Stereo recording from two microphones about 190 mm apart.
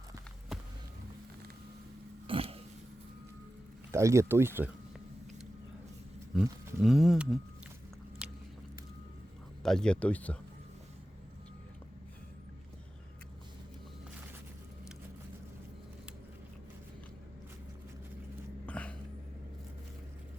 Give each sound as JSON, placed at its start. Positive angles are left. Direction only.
{"t": 2.2, "sound": "a sound", "side_deg": -30}
{"t": 3.9, "sound": "speech", "side_deg": -15}
{"t": 6.3, "sound": "speech", "side_deg": 0}
{"t": 8.2, "sound": "biting", "side_deg": -5}
{"t": 9.6, "sound": "speech", "side_deg": 5}
{"t": 18.6, "sound": "a sound", "side_deg": 5}